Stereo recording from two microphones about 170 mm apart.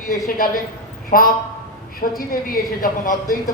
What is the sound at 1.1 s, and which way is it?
A woman's voice, 55° left (ahead or behind).